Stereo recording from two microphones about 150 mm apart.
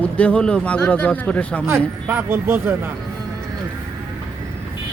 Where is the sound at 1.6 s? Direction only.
15° right (ahead or behind).